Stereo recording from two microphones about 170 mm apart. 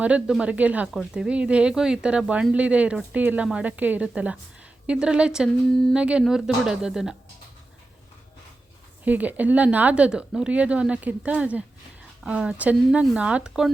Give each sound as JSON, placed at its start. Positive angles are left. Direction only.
{"t": 0.0, "sound": "speech", "side_deg": -5}
{"t": 9.0, "sound": "speech", "side_deg": -10}